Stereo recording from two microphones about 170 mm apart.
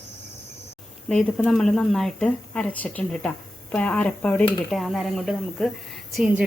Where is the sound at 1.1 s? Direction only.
5° left (ahead or behind).